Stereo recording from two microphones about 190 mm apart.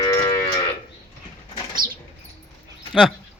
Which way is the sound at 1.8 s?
50° right (ahead or behind).